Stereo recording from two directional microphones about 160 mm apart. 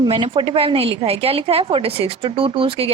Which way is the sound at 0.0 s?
30° right (ahead or behind).